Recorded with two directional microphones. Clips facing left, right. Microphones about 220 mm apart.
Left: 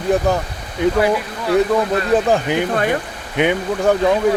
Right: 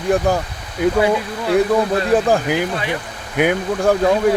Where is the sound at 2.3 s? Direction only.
5° right (ahead or behind).